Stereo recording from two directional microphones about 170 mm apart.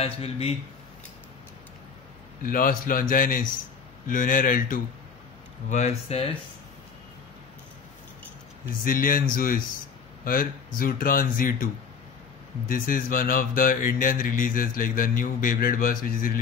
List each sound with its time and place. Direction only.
0.0 s a man's voice: 35° left (ahead or behind)
2.4 s speech: 55° left (ahead or behind)
8.8 s speech: 55° left (ahead or behind)
12.8 s speech: 55° left (ahead or behind)